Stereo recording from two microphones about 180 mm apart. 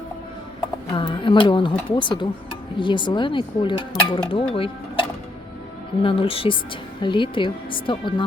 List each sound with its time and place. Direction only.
0.9 s speech: 30° left (ahead or behind)